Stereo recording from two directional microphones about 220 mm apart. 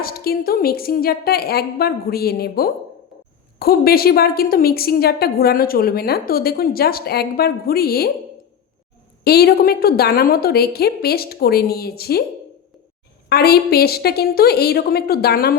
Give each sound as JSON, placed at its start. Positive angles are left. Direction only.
{"t": 0.0, "sound": "a woman's voice", "side_deg": 45}
{"t": 9.2, "sound": "a woman's voice", "side_deg": 45}
{"t": 13.2, "sound": "a woman's voice", "side_deg": 45}